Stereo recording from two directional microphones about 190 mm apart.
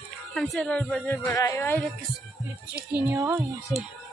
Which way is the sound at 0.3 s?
Centre (ahead or behind).